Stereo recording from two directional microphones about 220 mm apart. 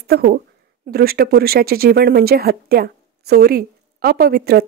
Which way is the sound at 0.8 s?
45° right (ahead or behind).